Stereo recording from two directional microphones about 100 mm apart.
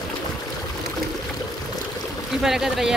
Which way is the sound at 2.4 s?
5° right (ahead or behind).